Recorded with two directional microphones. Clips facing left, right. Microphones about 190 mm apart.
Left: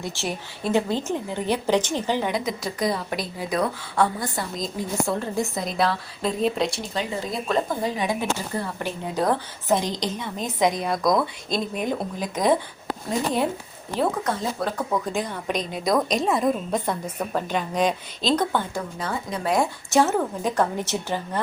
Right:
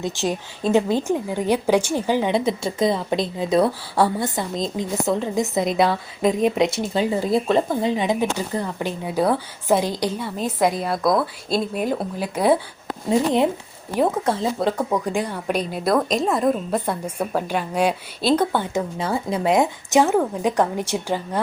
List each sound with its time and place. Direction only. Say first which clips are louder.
0.0 s speech: right 6 dB; 20° right (ahead or behind)
2.3 s speech: right 6 dB; 30° right (ahead or behind)
8.8 s speech: right 4 dB; 10° right (ahead or behind)
13.1 s speech: right 6 dB; 20° right (ahead or behind)